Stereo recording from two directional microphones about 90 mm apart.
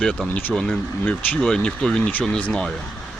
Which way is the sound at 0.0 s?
10° left (ahead or behind).